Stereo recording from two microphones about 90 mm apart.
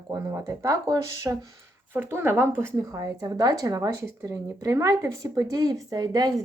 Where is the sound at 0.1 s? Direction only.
40° right (ahead or behind).